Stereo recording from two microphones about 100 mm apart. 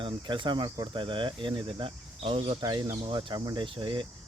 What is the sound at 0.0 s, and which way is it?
Speech, 55° right (ahead or behind).